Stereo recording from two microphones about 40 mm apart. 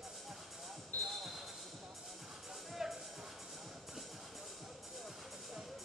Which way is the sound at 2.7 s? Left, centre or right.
Centre.